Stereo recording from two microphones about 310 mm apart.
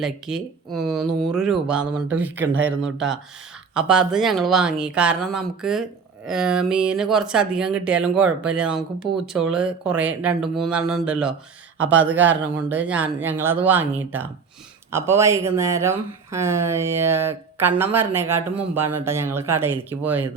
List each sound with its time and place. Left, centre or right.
0.0 s speech: centre